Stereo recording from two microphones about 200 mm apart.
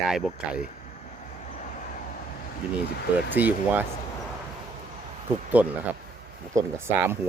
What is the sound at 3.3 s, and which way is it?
Speech, 10° right (ahead or behind).